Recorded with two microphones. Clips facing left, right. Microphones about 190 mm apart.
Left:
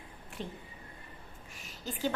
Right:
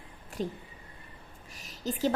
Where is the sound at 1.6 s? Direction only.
40° right (ahead or behind).